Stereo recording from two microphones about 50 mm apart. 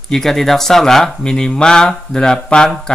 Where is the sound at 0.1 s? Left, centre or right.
Centre.